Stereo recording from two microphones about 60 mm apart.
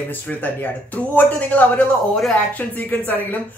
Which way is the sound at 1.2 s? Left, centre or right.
Left.